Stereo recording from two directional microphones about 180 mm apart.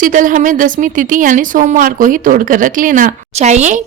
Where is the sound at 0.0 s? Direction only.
45° right (ahead or behind).